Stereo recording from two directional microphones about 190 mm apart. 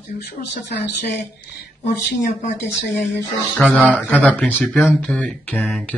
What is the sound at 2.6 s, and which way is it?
Speech, 65° left (ahead or behind).